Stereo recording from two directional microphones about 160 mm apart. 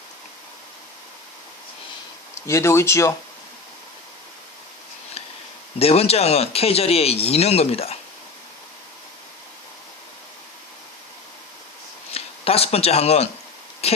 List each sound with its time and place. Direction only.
2.5 s speech: 15° left (ahead or behind)
5.8 s speech: 40° left (ahead or behind)
12.1 s speech: 40° left (ahead or behind)